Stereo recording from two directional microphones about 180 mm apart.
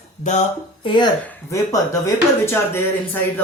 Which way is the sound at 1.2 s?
15° left (ahead or behind).